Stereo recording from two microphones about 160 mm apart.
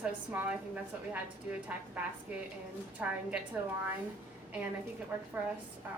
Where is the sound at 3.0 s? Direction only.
10° right (ahead or behind).